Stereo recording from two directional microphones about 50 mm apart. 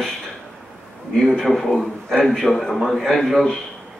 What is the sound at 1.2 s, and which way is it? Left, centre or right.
A man's voice, centre.